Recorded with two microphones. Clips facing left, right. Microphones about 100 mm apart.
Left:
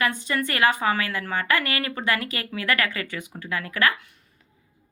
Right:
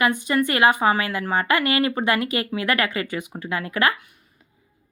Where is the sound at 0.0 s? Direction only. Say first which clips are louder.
Right 5 dB; 15° right (ahead or behind).